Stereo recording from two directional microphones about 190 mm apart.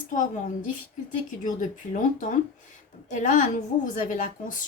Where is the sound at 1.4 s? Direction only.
40° left (ahead or behind).